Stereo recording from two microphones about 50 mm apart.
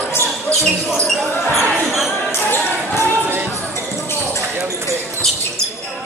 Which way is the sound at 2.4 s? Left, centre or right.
Left.